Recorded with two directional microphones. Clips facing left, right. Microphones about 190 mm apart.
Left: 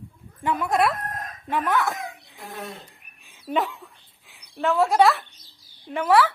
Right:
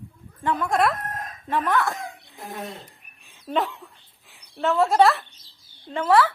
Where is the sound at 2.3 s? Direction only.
20° right (ahead or behind).